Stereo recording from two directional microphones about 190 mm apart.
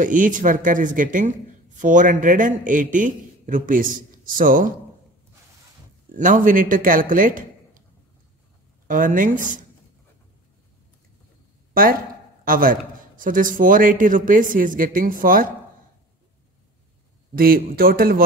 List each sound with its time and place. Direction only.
0.0 s a man's voice: 45° right (ahead or behind)
6.1 s a man's voice: 45° right (ahead or behind)
8.8 s a man's voice: 45° right (ahead or behind)
11.7 s a man's voice: 50° right (ahead or behind)
17.4 s a man's voice: 50° right (ahead or behind)